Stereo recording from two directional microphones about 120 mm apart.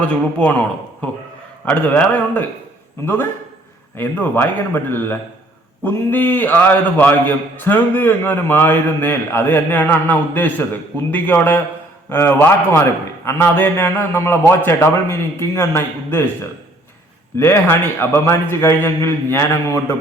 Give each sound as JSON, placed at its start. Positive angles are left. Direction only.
{"t": 0.0, "sound": "a man's voice", "side_deg": 10}
{"t": 1.6, "sound": "a man's voice", "side_deg": 15}